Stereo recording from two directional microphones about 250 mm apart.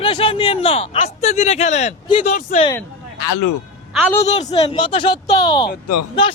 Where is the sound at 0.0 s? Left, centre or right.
Left.